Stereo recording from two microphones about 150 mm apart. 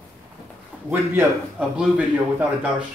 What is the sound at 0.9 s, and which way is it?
Speech, 10° right (ahead or behind).